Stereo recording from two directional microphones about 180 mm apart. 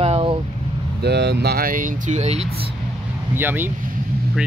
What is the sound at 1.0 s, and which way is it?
Speech, 65° right (ahead or behind).